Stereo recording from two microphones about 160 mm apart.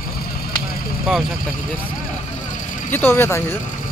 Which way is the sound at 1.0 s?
Centre (ahead or behind).